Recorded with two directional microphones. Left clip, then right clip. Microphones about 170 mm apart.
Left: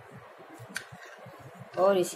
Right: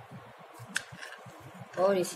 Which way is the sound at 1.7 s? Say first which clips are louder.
Left 3 dB; 10° left (ahead or behind).